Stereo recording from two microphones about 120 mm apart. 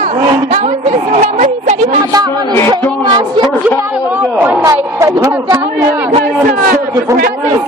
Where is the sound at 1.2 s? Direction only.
70° right (ahead or behind).